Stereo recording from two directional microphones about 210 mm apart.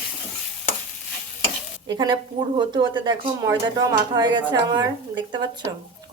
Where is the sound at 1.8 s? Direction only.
20° right (ahead or behind).